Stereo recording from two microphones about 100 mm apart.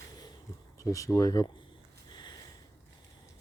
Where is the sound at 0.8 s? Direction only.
35° left (ahead or behind).